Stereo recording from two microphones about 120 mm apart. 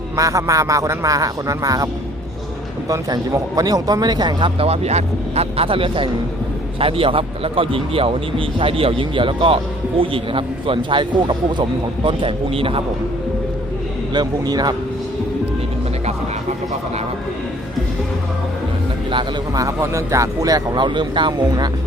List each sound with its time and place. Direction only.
0.2 s a man's voice: 25° right (ahead or behind)
2.9 s a man's voice: 30° right (ahead or behind); by 12.8 s 50° right (ahead or behind)
14.1 s speech: 35° right (ahead or behind)
19.5 s speech: 25° right (ahead or behind)